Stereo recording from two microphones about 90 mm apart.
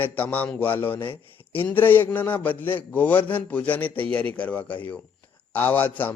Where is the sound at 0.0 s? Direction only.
20° left (ahead or behind).